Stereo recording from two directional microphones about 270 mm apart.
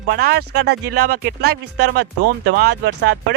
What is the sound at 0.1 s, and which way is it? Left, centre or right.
Speech, right.